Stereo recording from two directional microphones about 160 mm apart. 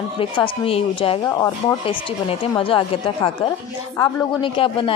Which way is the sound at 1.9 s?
35° left (ahead or behind).